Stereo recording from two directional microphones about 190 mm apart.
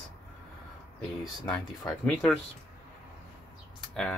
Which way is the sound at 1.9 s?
5° left (ahead or behind).